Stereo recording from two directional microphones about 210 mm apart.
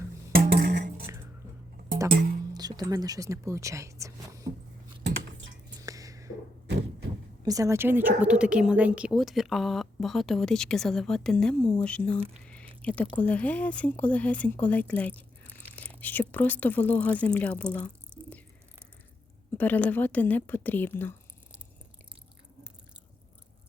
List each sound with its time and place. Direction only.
0.3 s music: 50° right (ahead or behind)
1.0 s music: 10° right (ahead or behind)
2.1 s speech: 45° right (ahead or behind)
2.5 s speech: 20° right (ahead or behind)
5.8 s a sound: 15° right (ahead or behind)
7.4 s a woman's voice: 15° right (ahead or behind); by 12.2 s 5° left (ahead or behind)
12.5 s a sound: 5° left (ahead or behind)
13.1 s speech: 5° left (ahead or behind)
18.1 s whispering: 10° right (ahead or behind)
19.5 s speech: 10° left (ahead or behind)